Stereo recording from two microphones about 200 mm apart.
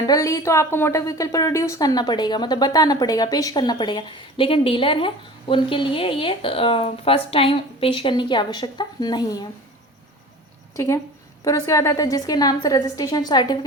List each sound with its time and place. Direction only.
0.0 s speech: 15° left (ahead or behind)
10.8 s a woman's voice: 15° left (ahead or behind)